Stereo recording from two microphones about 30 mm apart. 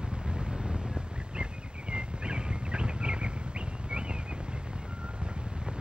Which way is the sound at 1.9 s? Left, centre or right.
Right.